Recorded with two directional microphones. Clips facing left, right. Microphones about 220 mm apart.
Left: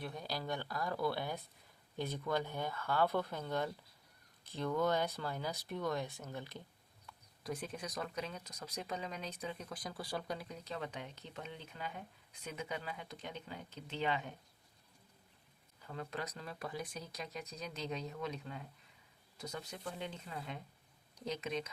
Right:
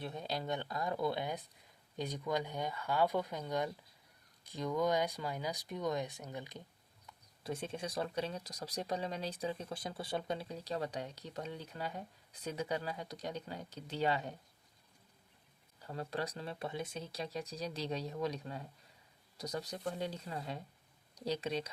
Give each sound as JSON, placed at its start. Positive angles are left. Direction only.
{"t": 0.0, "sound": "speech", "side_deg": -25}
{"t": 7.4, "sound": "speech", "side_deg": -25}
{"t": 15.8, "sound": "speech", "side_deg": -35}